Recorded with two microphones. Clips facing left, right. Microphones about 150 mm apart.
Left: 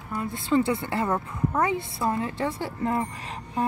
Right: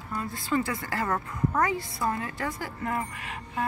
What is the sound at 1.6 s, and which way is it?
A woman's voice, 25° left (ahead or behind).